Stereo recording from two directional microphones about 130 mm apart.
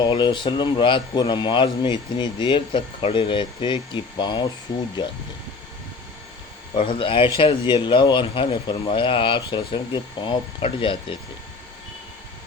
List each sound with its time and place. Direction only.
0.0 s a man's voice: 35° left (ahead or behind)
6.7 s a man's voice: 45° left (ahead or behind)